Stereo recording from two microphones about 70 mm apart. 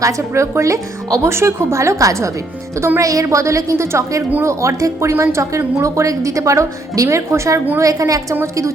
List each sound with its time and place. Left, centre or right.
0.0 s speech: right